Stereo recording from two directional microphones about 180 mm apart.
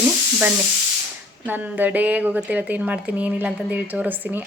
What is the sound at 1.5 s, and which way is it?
Speech, 10° right (ahead or behind).